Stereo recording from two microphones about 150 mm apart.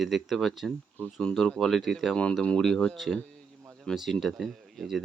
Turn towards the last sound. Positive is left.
turn(degrees=0)  # may be behind; listen again after turning